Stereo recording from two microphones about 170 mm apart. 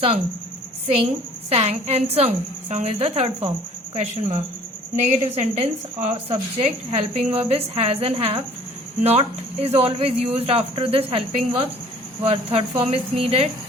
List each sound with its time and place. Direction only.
0.9 s speech: 35° right (ahead or behind)